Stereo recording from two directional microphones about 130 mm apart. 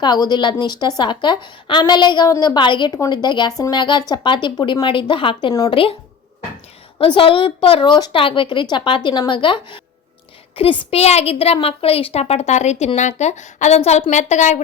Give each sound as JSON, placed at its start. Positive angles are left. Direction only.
{"t": 0.0, "sound": "a woman's voice", "side_deg": 30}
{"t": 7.0, "sound": "a woman's voice", "side_deg": 45}